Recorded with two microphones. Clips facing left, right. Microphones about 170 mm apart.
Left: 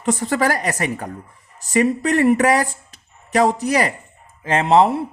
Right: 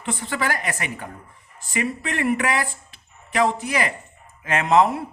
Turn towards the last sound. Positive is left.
turn(degrees=30)  # may be behind; listen again after turning